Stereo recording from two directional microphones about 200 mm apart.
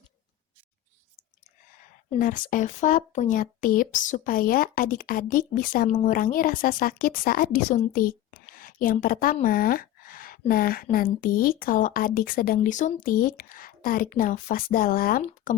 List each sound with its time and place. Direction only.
2.1 s speech: 45° left (ahead or behind)